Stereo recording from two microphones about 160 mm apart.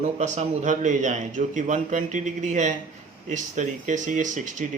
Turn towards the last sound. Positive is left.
turn(degrees=-50)  # may be behind; listen again after turning